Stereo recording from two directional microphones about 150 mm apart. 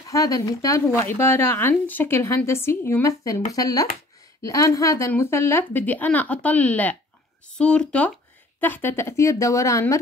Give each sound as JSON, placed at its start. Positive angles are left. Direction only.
{"t": 0.1, "sound": "a woman's voice", "side_deg": 25}